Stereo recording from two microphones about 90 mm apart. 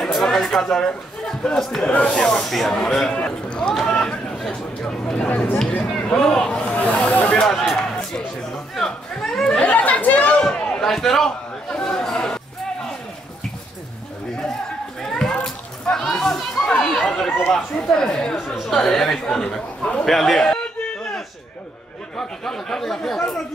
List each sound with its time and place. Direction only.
0.0 s speech: 5° left (ahead or behind)
8.7 s chatter: 5° left (ahead or behind)
9.7 s chatter: 15° left (ahead or behind)
15.0 s a sound: 5° left (ahead or behind)
15.4 s children playing: 5° left (ahead or behind)
16.8 s run: 5° left (ahead or behind)
17.5 s speech: 5° left (ahead or behind)
22.1 s speech: 5° left (ahead or behind)